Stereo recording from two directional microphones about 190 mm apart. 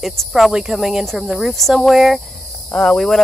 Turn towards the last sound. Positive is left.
turn(degrees=0)  # may be behind; listen again after turning